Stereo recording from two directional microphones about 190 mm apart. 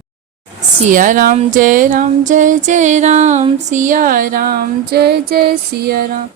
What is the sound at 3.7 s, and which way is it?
Female singing, 45° right (ahead or behind).